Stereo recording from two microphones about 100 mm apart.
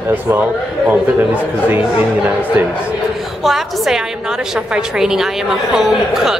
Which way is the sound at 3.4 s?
5° right (ahead or behind).